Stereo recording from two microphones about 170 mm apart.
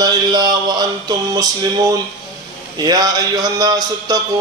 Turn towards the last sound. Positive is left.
turn(degrees=-20)  # may be behind; listen again after turning